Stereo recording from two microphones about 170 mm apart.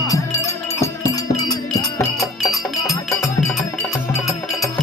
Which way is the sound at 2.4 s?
Centre (ahead or behind).